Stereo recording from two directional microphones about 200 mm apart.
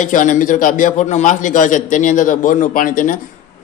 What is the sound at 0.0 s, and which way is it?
A man's voice, 40° left (ahead or behind).